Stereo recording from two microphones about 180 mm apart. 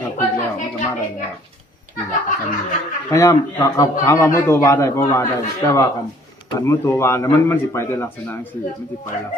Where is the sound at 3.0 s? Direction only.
20° left (ahead or behind).